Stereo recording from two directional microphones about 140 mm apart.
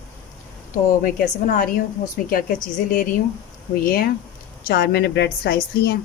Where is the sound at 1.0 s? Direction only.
90° left.